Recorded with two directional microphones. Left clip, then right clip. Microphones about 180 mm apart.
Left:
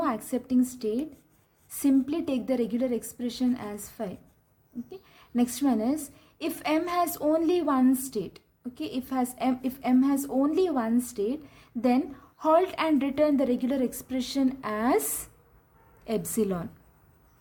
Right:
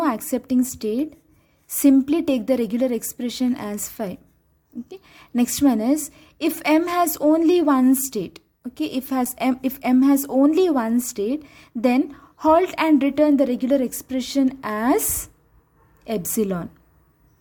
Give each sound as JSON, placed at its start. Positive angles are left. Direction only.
{"t": 0.0, "sound": "a woman's voice", "side_deg": -40}